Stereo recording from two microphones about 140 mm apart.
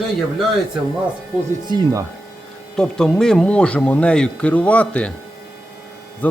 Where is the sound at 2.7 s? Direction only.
5° left (ahead or behind).